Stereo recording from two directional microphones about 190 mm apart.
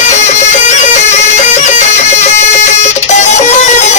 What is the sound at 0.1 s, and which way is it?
Music, 40° left (ahead or behind).